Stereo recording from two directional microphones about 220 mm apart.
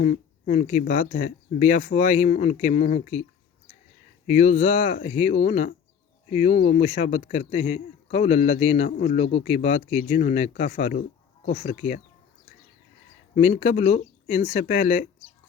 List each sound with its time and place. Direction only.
0.0 s speech: 30° left (ahead or behind)
4.3 s speech: 30° left (ahead or behind)
13.3 s speech: 30° left (ahead or behind)